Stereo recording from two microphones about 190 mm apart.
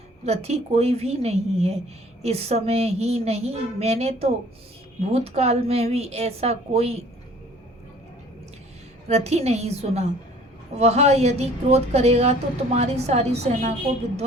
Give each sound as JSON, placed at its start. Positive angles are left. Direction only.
{"t": 0.3, "sound": "a woman's voice", "side_deg": -35}
{"t": 9.0, "sound": "a woman's voice", "side_deg": -35}